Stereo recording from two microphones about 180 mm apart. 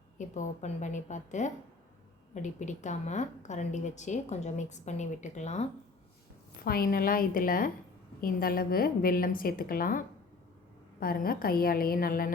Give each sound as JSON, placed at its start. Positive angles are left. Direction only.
{"t": 0.2, "sound": "a woman's voice", "side_deg": 40}
{"t": 6.7, "sound": "a woman's voice", "side_deg": 55}
{"t": 11.0, "sound": "a woman's voice", "side_deg": 55}